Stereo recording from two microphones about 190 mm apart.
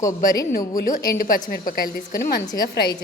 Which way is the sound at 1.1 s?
50° left (ahead or behind).